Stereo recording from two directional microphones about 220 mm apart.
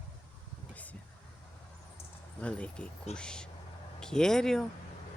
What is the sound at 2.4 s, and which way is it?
Speech, 5° left (ahead or behind).